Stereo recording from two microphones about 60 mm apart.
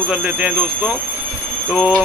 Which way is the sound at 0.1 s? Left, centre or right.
Centre.